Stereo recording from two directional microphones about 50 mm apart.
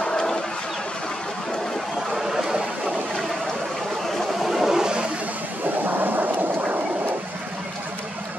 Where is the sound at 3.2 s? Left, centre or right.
Centre.